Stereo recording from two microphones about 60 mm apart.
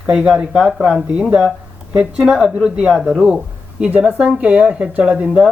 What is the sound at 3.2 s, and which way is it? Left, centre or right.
A man's voice, centre.